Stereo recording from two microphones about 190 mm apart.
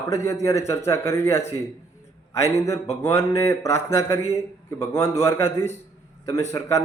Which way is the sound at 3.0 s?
15° left (ahead or behind).